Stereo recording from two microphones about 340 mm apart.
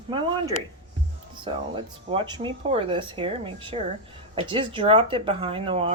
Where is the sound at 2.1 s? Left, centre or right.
Centre.